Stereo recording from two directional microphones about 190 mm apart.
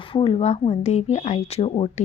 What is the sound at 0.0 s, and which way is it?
A woman's voice, 25° left (ahead or behind).